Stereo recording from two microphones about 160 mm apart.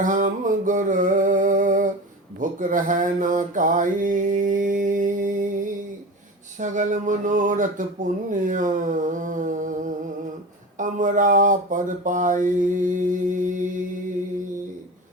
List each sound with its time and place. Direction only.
0.0 s a sound: 55° right (ahead or behind)
2.4 s mantra: 55° right (ahead or behind)
6.6 s speech: 50° right (ahead or behind)